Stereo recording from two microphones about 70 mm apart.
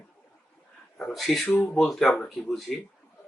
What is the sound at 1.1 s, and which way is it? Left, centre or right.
Speech, centre.